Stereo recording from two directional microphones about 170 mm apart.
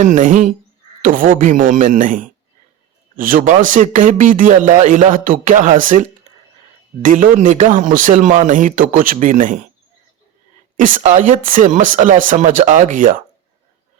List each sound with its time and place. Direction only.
0.0 s speech: 50° right (ahead or behind)
10.8 s speech: 50° right (ahead or behind)